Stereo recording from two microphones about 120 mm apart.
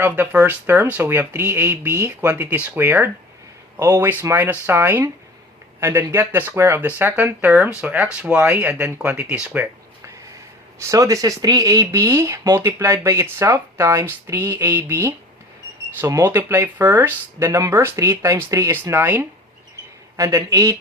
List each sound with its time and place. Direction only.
0.0 s speech: 15° right (ahead or behind)
10.8 s speech: 25° right (ahead or behind)
16.2 s speech: 20° right (ahead or behind)